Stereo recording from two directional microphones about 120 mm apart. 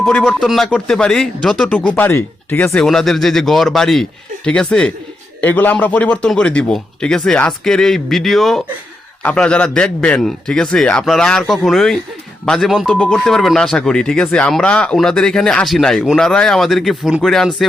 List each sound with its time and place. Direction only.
0.0 s speech: 15° left (ahead or behind)
0.3 s speech: centre (ahead or behind); by 2.7 s 20° left (ahead or behind)
2.7 s a man's voice: 5° left (ahead or behind)